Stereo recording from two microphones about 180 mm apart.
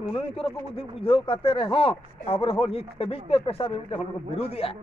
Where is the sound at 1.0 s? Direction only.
30° left (ahead or behind).